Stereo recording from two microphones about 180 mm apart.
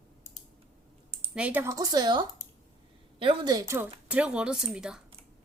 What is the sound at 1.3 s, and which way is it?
Speech, 10° right (ahead or behind).